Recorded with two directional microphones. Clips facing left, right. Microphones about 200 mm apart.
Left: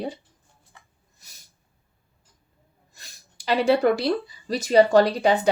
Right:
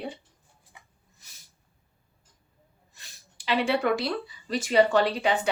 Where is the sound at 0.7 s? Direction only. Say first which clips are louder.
Even; 10° right (ahead or behind).